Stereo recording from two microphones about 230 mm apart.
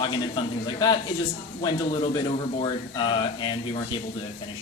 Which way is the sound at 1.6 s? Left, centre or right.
Left.